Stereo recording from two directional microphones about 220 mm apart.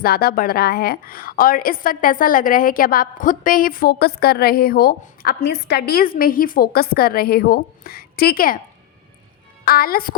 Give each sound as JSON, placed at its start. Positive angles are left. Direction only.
{"t": 0.0, "sound": "a woman's voice", "side_deg": 45}
{"t": 9.6, "sound": "a woman's voice", "side_deg": 40}